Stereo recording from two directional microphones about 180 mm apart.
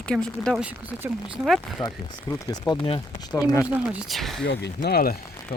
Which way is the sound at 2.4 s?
25° left (ahead or behind).